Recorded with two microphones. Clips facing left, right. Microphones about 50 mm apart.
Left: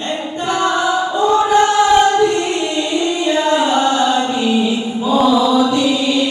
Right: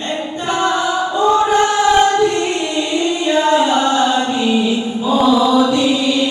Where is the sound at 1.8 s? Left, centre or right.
Left.